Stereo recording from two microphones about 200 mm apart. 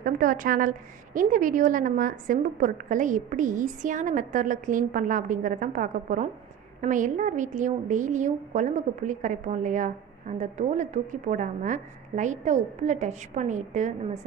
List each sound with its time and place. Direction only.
0.0 s a woman's voice: 45° right (ahead or behind)